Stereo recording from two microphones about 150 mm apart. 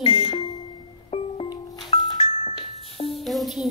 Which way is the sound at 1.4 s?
25° left (ahead or behind).